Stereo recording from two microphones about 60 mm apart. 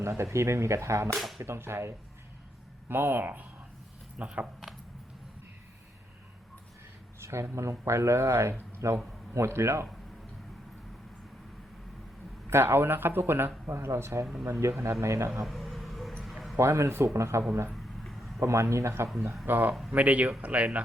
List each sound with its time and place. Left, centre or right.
0.0 s speech: right
2.9 s speech: right
4.2 s speech: right
7.2 s a sound: right
7.5 s speech: right
12.5 s speech: right
15.4 s a sound: centre
16.6 s speech: right
17.7 s a sound: centre
18.3 s speech: right
19.5 s speech: right